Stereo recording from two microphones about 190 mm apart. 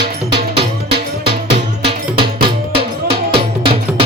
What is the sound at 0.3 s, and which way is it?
Music, 30° right (ahead or behind).